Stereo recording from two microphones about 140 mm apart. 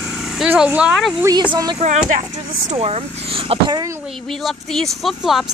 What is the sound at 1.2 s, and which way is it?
Speech, 30° right (ahead or behind).